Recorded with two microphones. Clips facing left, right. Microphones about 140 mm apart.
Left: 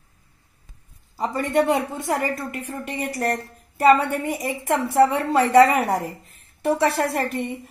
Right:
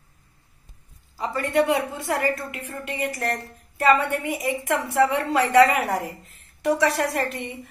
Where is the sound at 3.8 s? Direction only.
35° left (ahead or behind).